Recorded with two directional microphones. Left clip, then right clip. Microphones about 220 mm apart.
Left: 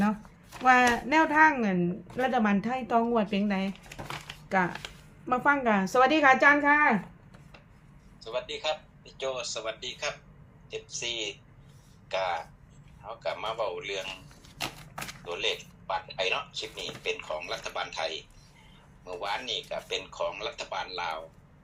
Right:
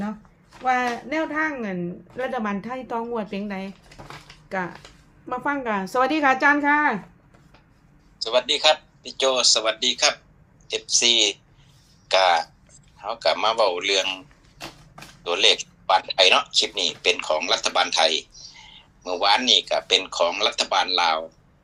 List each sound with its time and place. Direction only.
0.6 s speech: 10° left (ahead or behind); by 6.9 s 15° right (ahead or behind)
8.2 s speech: 50° right (ahead or behind)
15.2 s speech: 50° right (ahead or behind)